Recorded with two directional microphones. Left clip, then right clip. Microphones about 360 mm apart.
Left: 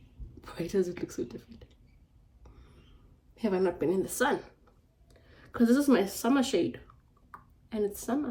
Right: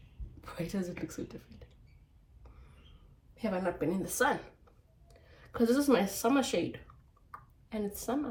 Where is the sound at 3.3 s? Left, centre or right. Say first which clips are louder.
Left 5 dB; centre.